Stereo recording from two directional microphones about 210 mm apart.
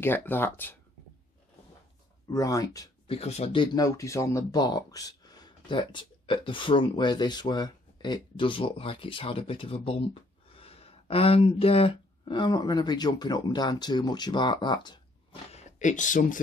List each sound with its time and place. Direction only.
0.0 s speech: 10° left (ahead or behind)
2.2 s speech: 15° left (ahead or behind)
3.2 s speech: 30° left (ahead or behind)
15.5 s a sound: 35° left (ahead or behind)